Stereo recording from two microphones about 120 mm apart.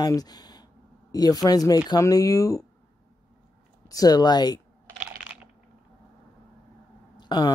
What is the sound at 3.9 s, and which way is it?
Speech, 30° left (ahead or behind).